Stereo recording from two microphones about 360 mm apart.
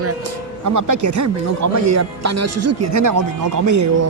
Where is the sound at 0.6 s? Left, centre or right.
Right.